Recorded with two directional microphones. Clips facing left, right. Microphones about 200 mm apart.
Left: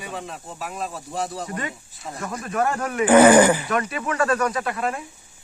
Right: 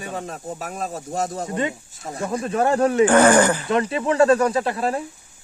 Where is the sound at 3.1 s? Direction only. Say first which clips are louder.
Left 6 dB; 20° left (ahead or behind).